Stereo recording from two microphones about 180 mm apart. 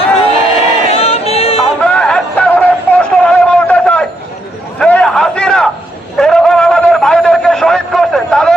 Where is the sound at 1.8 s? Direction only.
5° left (ahead or behind).